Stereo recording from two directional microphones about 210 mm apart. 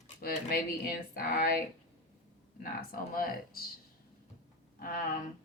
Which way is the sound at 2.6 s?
45° left (ahead or behind).